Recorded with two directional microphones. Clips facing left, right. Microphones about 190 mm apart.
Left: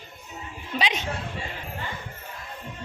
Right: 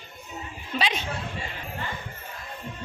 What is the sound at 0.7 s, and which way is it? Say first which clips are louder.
Chatter: even; 15° left (ahead or behind).